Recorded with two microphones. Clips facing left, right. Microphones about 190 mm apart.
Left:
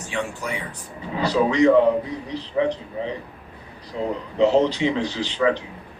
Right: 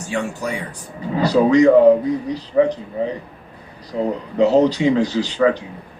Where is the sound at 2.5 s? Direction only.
45° right (ahead or behind).